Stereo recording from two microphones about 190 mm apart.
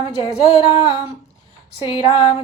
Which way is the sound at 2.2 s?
25° left (ahead or behind).